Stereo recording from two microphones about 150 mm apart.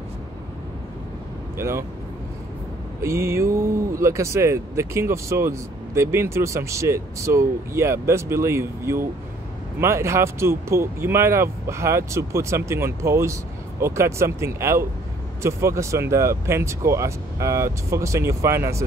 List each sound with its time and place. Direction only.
1.6 s speech: 20° right (ahead or behind)
3.0 s speech: 20° right (ahead or behind)